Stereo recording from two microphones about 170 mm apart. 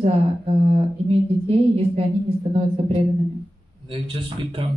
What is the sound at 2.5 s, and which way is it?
Speech, 35° right (ahead or behind).